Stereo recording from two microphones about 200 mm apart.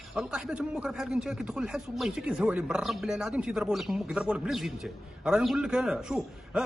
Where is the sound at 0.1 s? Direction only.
Centre (ahead or behind).